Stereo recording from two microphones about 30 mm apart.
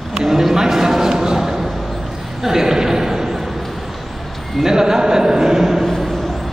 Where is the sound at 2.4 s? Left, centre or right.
Centre.